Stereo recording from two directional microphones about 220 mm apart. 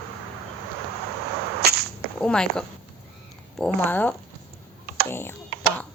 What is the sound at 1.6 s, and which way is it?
Whip, 45° right (ahead or behind).